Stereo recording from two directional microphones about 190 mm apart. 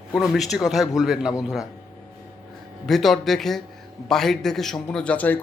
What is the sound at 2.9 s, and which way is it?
A man's voice, centre (ahead or behind).